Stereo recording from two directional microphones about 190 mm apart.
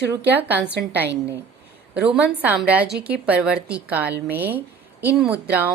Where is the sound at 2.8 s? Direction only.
60° right (ahead or behind).